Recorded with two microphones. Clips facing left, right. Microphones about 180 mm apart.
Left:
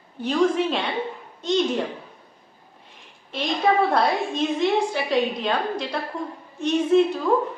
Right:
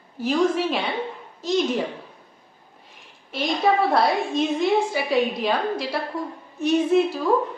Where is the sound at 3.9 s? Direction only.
Centre (ahead or behind).